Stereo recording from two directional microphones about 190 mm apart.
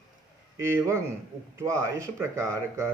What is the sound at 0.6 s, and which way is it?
Speech, 15° right (ahead or behind).